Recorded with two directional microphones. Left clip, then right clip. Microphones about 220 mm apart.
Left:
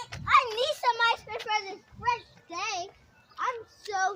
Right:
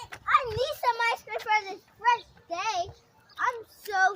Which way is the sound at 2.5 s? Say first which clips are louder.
Right 4 dB; 40° right (ahead or behind).